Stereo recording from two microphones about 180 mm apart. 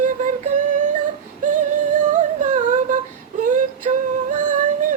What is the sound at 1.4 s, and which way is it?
Humming, 45° right (ahead or behind).